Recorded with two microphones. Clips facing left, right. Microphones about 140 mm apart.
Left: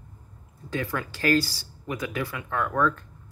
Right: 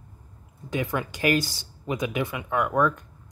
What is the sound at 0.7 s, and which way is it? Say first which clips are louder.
Speech: right 2 dB; 20° right (ahead or behind).